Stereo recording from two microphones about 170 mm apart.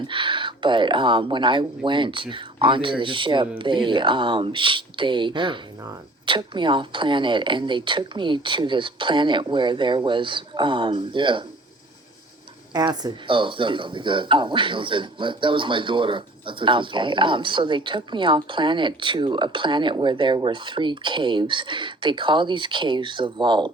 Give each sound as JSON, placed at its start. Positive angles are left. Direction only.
{"t": 0.1, "sound": "speech", "side_deg": -30}
{"t": 12.7, "sound": "speech", "side_deg": -25}